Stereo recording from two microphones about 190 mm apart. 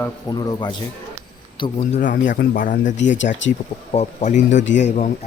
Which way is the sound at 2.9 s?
75° left (ahead or behind).